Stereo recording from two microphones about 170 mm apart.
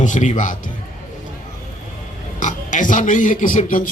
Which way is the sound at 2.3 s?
50° left (ahead or behind).